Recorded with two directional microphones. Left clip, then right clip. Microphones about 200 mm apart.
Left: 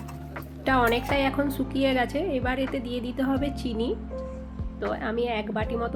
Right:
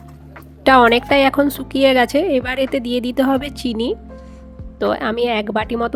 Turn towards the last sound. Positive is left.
turn(degrees=-60)  # may be behind; listen again after turning